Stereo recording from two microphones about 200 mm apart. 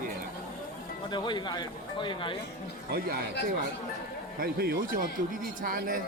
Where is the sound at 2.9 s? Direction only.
50° right (ahead or behind).